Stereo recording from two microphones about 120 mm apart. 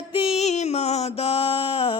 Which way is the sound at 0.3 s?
70° left (ahead or behind).